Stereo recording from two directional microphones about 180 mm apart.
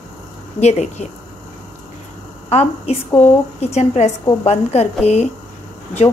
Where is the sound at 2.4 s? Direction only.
35° left (ahead or behind).